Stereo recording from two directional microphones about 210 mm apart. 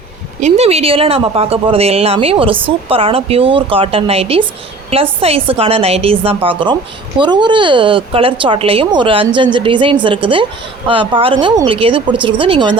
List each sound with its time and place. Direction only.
0.3 s speech: 35° right (ahead or behind)